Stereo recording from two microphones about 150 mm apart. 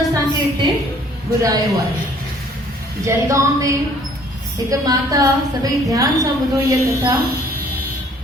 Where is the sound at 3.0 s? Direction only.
20° right (ahead or behind).